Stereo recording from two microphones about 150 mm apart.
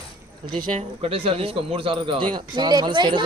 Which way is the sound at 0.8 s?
40° right (ahead or behind).